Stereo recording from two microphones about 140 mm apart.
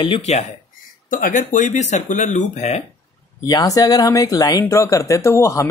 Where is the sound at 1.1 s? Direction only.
65° left (ahead or behind).